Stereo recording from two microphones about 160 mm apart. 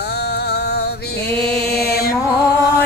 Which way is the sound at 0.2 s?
90° left.